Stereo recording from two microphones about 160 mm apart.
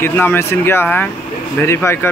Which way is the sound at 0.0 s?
15° left (ahead or behind).